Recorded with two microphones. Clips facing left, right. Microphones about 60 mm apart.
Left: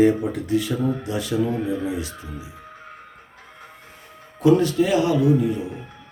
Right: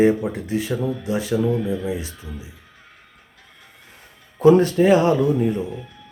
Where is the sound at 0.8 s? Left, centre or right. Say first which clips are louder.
Left 1 dB; left.